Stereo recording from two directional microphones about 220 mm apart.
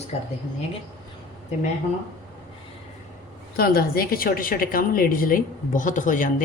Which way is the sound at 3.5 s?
45° left (ahead or behind).